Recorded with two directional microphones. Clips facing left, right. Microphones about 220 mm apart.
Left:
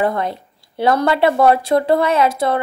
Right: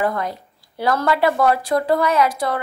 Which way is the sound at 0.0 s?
25° left (ahead or behind).